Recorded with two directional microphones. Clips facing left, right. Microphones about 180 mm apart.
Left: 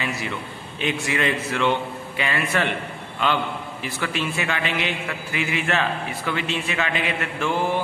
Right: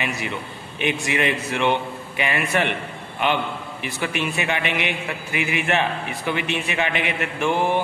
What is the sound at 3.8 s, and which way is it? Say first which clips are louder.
A man's voice: right 2 dB; 15° right (ahead or behind).